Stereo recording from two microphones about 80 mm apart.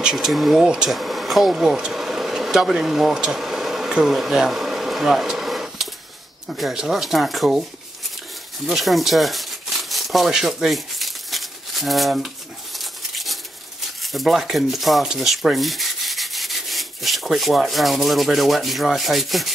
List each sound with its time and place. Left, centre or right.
0.0 s speech: centre
8.6 s a sound: centre
14.1 s speech: centre